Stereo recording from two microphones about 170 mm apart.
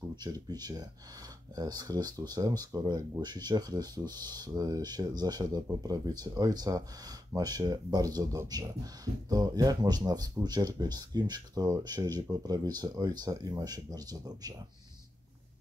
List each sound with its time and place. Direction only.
0.1 s speech: 25° right (ahead or behind)